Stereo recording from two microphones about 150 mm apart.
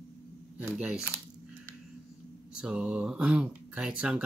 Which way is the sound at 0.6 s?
5° right (ahead or behind).